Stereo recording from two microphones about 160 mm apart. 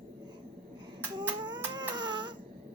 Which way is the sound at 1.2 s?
30° right (ahead or behind).